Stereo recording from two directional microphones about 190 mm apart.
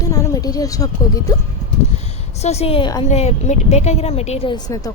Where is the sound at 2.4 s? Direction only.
35° left (ahead or behind).